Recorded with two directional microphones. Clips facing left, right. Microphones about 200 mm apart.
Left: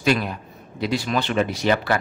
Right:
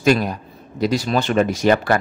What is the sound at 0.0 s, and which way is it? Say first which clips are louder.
Speech: right 4 dB; 40° right (ahead or behind).